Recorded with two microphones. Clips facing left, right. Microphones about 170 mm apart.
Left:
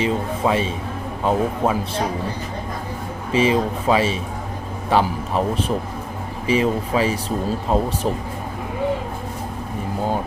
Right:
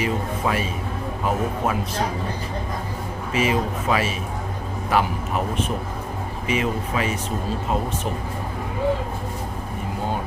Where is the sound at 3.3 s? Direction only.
30° left (ahead or behind).